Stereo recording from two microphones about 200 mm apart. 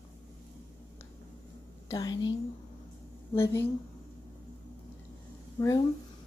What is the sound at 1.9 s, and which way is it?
Speech, 20° left (ahead or behind).